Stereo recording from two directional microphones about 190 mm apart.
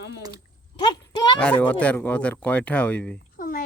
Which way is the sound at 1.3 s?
5° left (ahead or behind).